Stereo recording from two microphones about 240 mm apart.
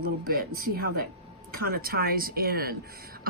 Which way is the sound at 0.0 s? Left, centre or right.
Right.